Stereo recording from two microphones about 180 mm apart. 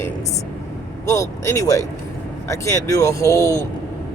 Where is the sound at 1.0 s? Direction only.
15° left (ahead or behind).